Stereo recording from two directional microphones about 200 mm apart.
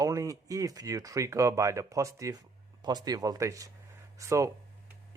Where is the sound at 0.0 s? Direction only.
15° right (ahead or behind).